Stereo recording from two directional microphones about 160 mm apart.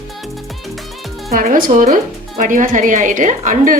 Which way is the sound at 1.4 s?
60° right (ahead or behind).